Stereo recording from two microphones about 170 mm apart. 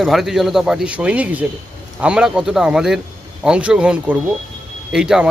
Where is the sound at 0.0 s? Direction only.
Centre (ahead or behind).